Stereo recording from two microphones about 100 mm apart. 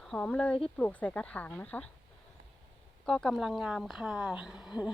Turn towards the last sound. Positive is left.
turn(degrees=-5)  # may be behind; listen again after turning